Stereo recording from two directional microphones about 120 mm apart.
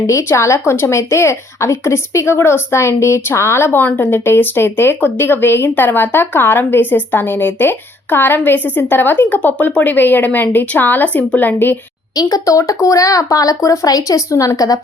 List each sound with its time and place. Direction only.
0.1 s a woman's voice: 25° left (ahead or behind)
12.1 s speech: 30° left (ahead or behind)